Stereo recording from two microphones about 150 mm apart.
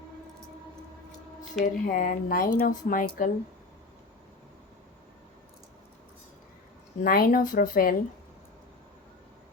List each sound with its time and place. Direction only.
1.4 s speech: 60° left (ahead or behind)
7.0 s speech: 75° left (ahead or behind)